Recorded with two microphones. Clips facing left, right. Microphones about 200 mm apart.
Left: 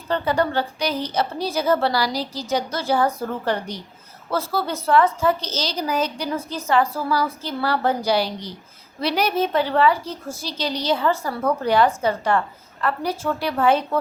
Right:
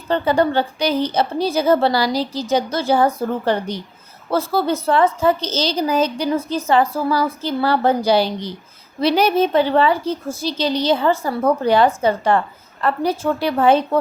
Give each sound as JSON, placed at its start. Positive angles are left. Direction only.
{"t": 0.1, "sound": "a woman's voice", "side_deg": -25}